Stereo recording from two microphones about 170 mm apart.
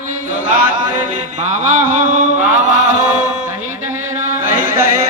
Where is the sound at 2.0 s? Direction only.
50° right (ahead or behind).